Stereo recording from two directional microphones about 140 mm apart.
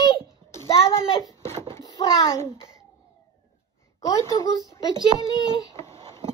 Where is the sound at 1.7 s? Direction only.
25° left (ahead or behind).